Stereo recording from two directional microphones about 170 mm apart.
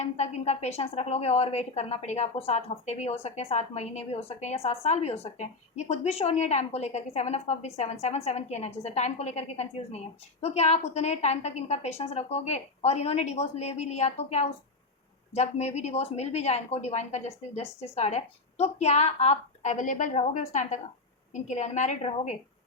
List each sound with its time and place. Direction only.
0.0 s a woman's voice: 40° left (ahead or behind)